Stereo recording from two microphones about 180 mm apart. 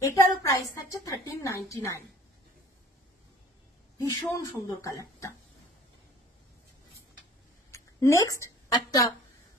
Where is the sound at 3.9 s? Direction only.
20° left (ahead or behind).